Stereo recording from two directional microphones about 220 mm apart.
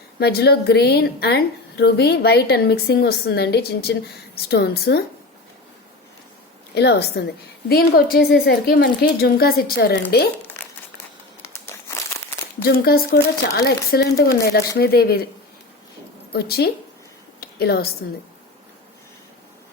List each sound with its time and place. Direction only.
0.2 s a woman's voice: 50° left (ahead or behind)
6.7 s a woman's voice: 50° left (ahead or behind)
11.4 s crumpling: 10° left (ahead or behind)
12.6 s a woman's voice: 45° left (ahead or behind)
16.3 s a woman's voice: 45° left (ahead or behind)
17.4 s a sound: 45° left (ahead or behind)